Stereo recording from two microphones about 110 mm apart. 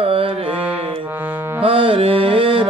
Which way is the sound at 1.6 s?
55° right (ahead or behind).